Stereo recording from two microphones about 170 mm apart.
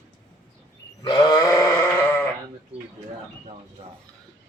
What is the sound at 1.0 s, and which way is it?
Sheep, 25° left (ahead or behind).